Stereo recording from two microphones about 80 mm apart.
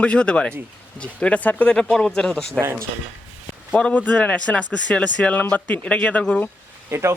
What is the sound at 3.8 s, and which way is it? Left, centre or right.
Speech, centre.